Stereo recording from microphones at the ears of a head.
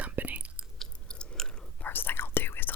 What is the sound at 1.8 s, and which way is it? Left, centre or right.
Whispering, left.